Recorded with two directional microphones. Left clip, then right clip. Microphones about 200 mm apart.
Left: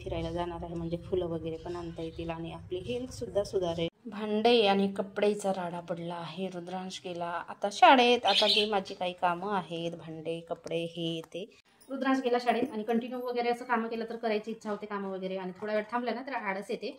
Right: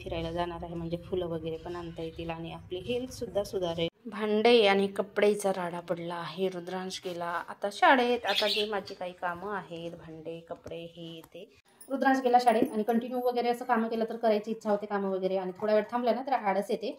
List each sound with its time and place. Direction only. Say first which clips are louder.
0.1 s a woman's voice: right 1 dB; centre (ahead or behind); by 10.6 s 20° left (ahead or behind)
12.0 s speech: right 5 dB; centre (ahead or behind)